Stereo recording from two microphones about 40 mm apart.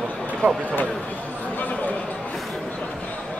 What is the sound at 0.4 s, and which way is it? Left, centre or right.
Speech, right.